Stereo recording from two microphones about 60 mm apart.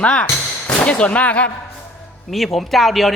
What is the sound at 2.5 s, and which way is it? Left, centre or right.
Speech, centre.